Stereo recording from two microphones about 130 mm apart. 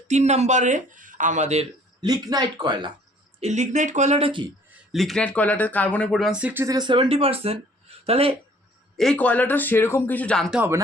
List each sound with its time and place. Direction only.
0.1 s speech: 60° right (ahead or behind)
2.0 s speech: 30° right (ahead or behind)
3.4 s speech: 60° right (ahead or behind)
4.3 s speech: 40° right (ahead or behind)
4.9 s speech: centre (ahead or behind)
6.1 s speech: centre (ahead or behind)
6.7 s speech: 35° right (ahead or behind)
9.0 s speech: 5° left (ahead or behind)